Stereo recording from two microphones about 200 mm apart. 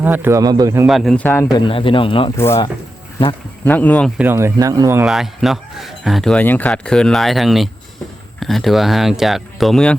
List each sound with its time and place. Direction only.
0.0 s speech: 10° right (ahead or behind)
0.9 s speech: centre (ahead or behind)
1.5 s speech: 25° left (ahead or behind)
2.3 s speech: 10° left (ahead or behind)
4.2 s speech: 10° right (ahead or behind)
5.0 s speech: centre (ahead or behind)